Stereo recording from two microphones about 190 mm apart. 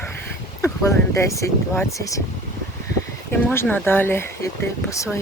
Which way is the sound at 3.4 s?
10° left (ahead or behind).